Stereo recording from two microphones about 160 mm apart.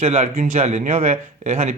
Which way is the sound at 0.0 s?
45° right (ahead or behind).